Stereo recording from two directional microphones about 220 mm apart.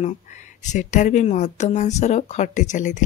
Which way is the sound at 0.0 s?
35° left (ahead or behind).